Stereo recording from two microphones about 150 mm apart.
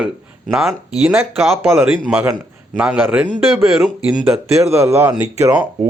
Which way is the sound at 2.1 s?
15° right (ahead or behind).